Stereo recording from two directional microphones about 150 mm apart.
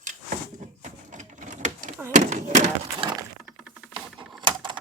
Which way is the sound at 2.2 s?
55° right (ahead or behind).